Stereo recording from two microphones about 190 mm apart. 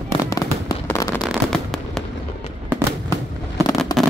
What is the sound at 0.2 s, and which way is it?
Fireworks, 20° left (ahead or behind).